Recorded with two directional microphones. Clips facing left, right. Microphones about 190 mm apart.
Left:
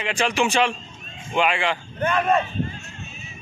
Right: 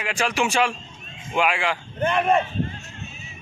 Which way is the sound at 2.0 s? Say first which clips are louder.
Right 1 dB; 20° right (ahead or behind).